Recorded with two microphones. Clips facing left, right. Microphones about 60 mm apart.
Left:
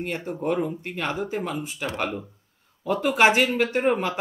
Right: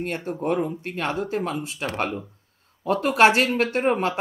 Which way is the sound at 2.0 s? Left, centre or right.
Centre.